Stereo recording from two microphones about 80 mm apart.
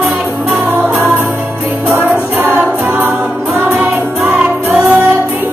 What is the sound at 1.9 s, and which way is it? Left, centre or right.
Music, right.